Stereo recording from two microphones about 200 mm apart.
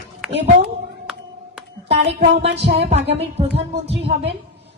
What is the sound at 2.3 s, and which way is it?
Speech, 60° right (ahead or behind).